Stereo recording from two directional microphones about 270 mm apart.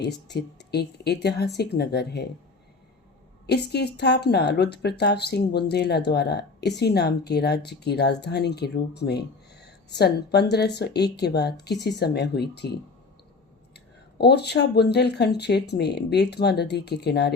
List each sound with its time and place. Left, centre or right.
0.3 s speech: left
3.4 s speech: left
13.7 s speech: left